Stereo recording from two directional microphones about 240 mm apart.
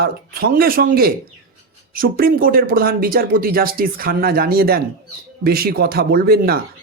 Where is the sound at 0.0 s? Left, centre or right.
Right.